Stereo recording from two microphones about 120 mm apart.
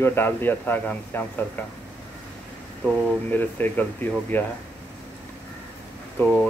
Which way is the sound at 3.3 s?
15° left (ahead or behind).